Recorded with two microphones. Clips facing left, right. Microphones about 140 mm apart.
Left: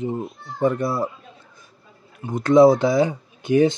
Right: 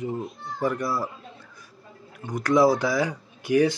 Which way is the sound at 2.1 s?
25° left (ahead or behind).